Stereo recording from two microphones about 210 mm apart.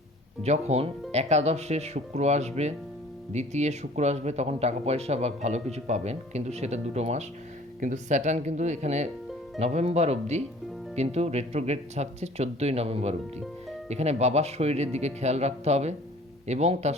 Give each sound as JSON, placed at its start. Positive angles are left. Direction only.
{"t": 0.4, "sound": "speech", "side_deg": -30}